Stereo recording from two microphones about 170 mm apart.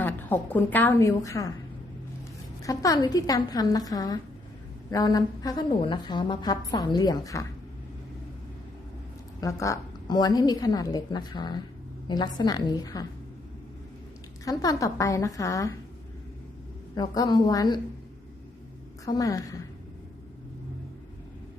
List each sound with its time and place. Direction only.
0.0 s a woman's voice: 10° left (ahead or behind)
2.6 s a woman's voice: 20° left (ahead or behind)
9.4 s a woman's voice: 20° left (ahead or behind)
14.4 s a woman's voice: 20° left (ahead or behind)
16.9 s a woman's voice: 25° left (ahead or behind)
19.0 s a woman's voice: 20° left (ahead or behind)